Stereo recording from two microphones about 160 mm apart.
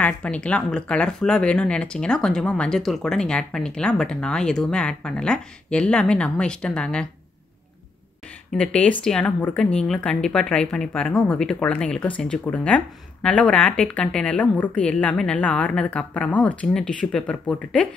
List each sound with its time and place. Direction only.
0.0 s speech: 5° left (ahead or behind)
8.5 s speech: 5° left (ahead or behind)